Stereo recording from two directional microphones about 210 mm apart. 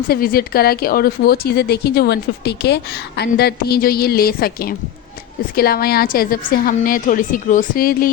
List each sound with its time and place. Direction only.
0.1 s speech: 45° left (ahead or behind)